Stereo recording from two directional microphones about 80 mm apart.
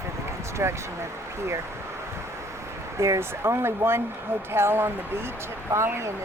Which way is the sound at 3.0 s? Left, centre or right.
Right.